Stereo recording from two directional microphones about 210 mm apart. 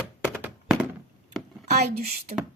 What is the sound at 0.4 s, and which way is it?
Thunk, 5° right (ahead or behind).